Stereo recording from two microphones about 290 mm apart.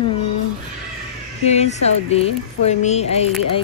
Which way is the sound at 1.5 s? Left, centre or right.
Left.